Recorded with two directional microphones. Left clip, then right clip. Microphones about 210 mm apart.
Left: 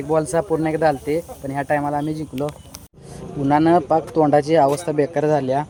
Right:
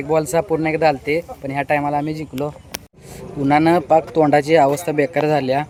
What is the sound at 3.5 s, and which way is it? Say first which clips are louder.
Speech: right 2 dB; centre (ahead or behind).